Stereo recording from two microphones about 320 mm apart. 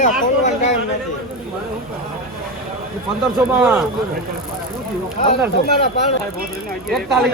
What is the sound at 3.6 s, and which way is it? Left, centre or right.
Speech, centre.